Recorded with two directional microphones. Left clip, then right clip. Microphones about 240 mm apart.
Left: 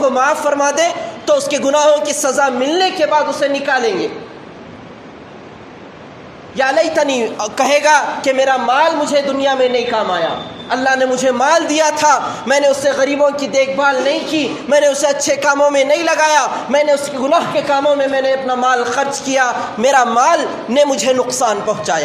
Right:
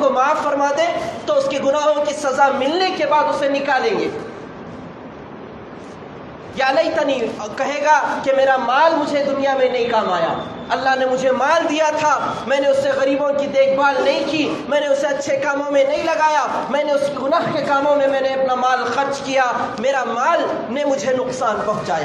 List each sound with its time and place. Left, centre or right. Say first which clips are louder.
0.0 s a man's voice: left 3 dB; left
6.5 s a man's voice: left 3 dB; left